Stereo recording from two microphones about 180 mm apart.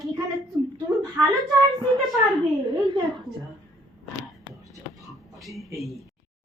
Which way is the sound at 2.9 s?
25° right (ahead or behind).